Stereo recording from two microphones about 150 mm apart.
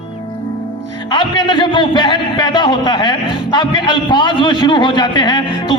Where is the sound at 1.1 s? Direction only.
30° left (ahead or behind).